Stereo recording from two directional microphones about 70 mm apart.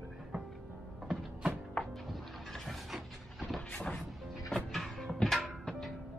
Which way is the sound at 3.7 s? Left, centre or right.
Centre.